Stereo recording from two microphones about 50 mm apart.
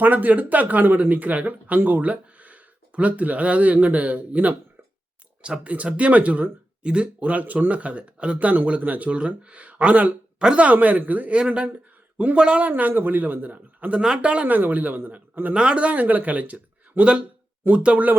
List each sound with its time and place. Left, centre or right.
0.0 s speech: right
12.6 s speech: right
14.0 s speech: centre
14.4 s speech: right
15.5 s speech: right